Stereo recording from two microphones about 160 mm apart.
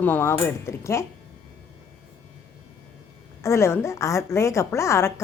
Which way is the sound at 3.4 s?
15° left (ahead or behind).